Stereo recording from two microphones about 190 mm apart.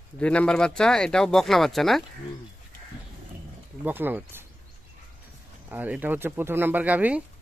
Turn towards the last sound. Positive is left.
turn(degrees=-10)  # may be behind; listen again after turning